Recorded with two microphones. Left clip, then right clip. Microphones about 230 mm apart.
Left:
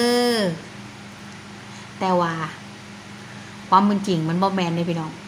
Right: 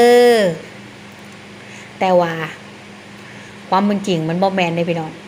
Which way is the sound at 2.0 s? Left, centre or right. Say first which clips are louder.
Right 6 dB; left.